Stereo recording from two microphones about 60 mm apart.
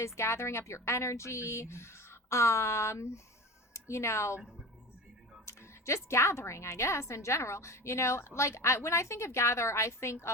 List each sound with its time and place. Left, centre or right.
0.0 s a woman's voice: left
5.5 s a woman's voice: left